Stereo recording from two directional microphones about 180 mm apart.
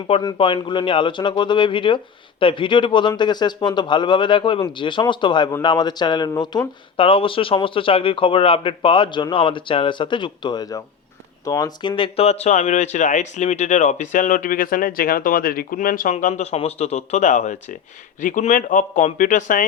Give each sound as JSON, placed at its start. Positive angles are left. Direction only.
{"t": 0.2, "sound": "a man's voice", "side_deg": 25}